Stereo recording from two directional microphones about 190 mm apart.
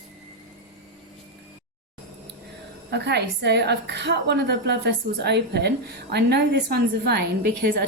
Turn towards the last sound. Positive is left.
turn(degrees=-55)  # may be behind; listen again after turning